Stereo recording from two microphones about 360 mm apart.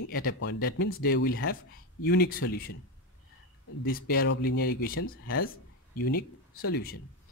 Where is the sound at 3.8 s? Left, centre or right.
Left.